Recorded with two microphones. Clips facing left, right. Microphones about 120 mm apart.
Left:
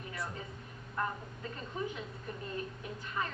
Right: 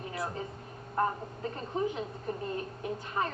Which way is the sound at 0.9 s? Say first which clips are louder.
Right 7 dB; 40° right (ahead or behind).